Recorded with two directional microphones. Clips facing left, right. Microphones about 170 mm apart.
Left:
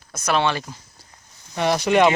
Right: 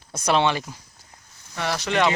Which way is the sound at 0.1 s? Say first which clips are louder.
Right 1 dB; 30° right (ahead or behind).